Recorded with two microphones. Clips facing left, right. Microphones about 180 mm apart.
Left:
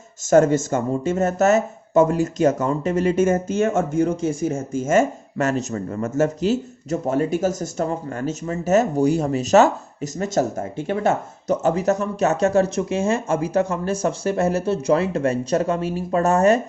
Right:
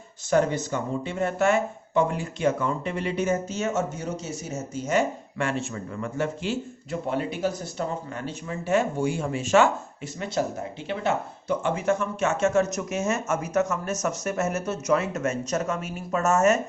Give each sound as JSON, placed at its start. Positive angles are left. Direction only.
{"t": 0.3, "sound": "speech", "side_deg": 45}